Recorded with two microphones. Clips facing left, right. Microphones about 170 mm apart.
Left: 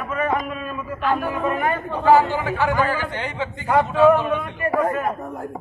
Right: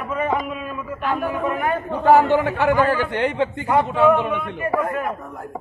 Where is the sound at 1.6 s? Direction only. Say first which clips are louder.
Right 1 dB; 5° right (ahead or behind).